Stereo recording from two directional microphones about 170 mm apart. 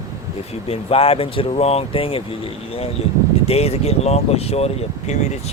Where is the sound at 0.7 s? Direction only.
35° left (ahead or behind).